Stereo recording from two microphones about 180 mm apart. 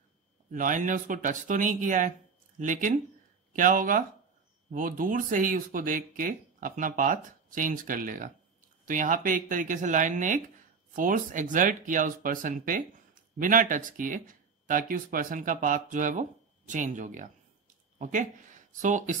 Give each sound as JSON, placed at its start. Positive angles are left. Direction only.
{"t": 0.5, "sound": "speech", "side_deg": -45}